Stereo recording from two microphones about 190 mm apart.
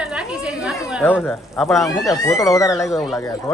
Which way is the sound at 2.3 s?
Centre (ahead or behind).